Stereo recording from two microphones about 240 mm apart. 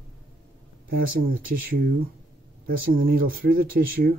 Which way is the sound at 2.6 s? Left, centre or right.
Right.